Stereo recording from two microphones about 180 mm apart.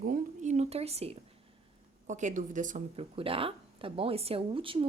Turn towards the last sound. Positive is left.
turn(degrees=-30)  # may be behind; listen again after turning